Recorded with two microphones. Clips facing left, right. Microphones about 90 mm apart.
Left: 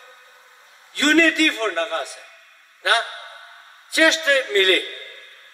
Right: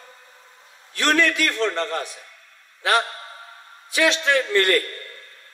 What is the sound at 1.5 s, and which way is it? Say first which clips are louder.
Speech: even; 20° left (ahead or behind).